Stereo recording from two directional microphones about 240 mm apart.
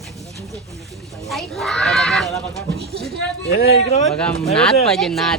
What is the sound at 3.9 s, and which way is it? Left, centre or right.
Speech, left.